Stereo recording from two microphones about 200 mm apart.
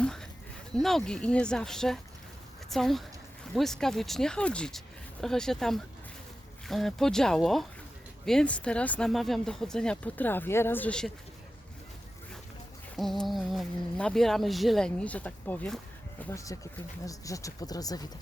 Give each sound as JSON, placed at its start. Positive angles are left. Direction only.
{"t": 0.0, "sound": "a sound", "side_deg": 5}
{"t": 0.8, "sound": "a woman's voice", "side_deg": 0}
{"t": 13.0, "sound": "speech", "side_deg": 0}